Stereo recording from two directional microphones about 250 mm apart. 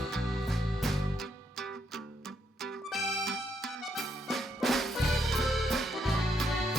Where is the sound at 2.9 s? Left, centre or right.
Centre.